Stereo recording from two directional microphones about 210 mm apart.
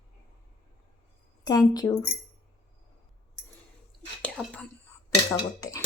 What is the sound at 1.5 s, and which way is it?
Speech, 20° left (ahead or behind).